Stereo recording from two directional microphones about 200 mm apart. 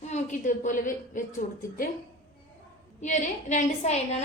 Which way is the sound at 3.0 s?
40° left (ahead or behind).